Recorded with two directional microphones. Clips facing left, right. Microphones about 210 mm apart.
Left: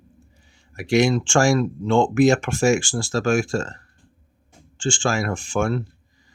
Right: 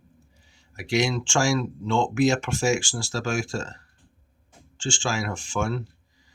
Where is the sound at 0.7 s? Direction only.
50° left (ahead or behind).